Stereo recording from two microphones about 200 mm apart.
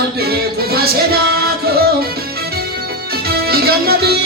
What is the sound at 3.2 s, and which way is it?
Music, 50° right (ahead or behind).